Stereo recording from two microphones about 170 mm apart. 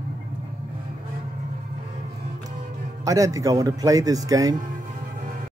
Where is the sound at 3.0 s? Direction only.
20° right (ahead or behind).